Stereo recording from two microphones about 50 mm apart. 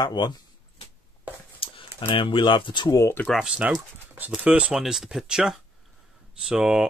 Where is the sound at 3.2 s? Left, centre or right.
Left.